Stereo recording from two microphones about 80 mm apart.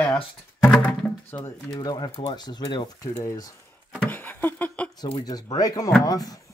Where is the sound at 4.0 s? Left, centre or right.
Left.